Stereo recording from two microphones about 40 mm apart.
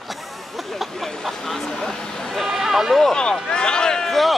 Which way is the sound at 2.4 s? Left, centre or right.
Centre.